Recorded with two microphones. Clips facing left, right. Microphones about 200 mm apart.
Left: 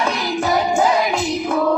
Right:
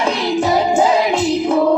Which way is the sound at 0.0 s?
30° right (ahead or behind).